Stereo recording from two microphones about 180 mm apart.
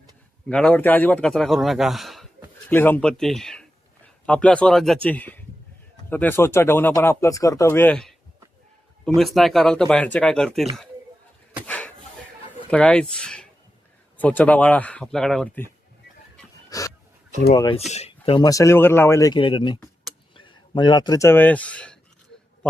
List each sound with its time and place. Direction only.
0.4 s a man's voice: 5° left (ahead or behind)
2.6 s a man's voice: 10° left (ahead or behind)
11.6 s a sound: 10° left (ahead or behind)
12.7 s speech: 5° left (ahead or behind)
16.6 s a sound: 20° left (ahead or behind)
17.5 s speech: 25° left (ahead or behind)
17.7 s speech: 35° left (ahead or behind)
18.4 s speech: 15° left (ahead or behind)
19.4 s speech: 25° left (ahead or behind); by 21.9 s 5° left (ahead or behind)